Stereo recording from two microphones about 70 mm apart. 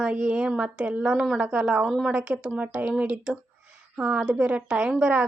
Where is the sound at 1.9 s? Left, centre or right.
Centre.